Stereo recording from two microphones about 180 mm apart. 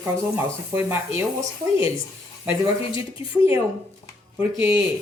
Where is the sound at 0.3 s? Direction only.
15° right (ahead or behind).